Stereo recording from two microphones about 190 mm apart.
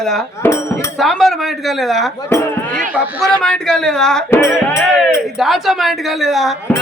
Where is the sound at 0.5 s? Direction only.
15° left (ahead or behind).